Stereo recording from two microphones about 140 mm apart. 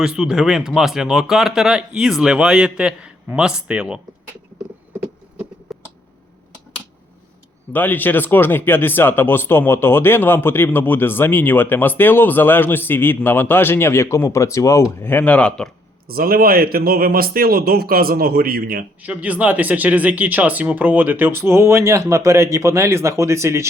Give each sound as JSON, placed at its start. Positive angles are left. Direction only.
{"t": 0.0, "sound": "speech", "side_deg": -5}
{"t": 5.7, "sound": "a sound", "side_deg": 0}
{"t": 7.7, "sound": "speech", "side_deg": 15}
{"t": 16.0, "sound": "a man's voice", "side_deg": -90}
{"t": 19.0, "sound": "speech", "side_deg": -10}